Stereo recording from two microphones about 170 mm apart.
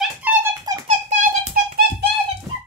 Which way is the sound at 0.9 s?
40° right (ahead or behind).